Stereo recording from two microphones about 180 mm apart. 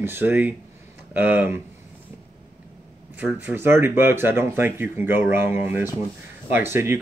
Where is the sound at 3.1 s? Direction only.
10° right (ahead or behind).